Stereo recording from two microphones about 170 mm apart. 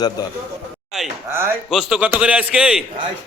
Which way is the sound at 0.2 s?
20° left (ahead or behind).